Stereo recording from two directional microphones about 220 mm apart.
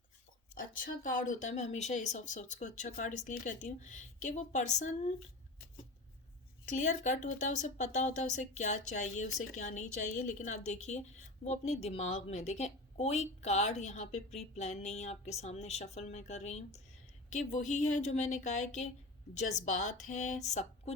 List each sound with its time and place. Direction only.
0.6 s speech: 40° left (ahead or behind)
6.7 s speech: 35° left (ahead or behind)